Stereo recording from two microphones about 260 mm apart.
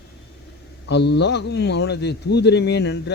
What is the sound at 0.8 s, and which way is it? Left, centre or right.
A man's voice, left.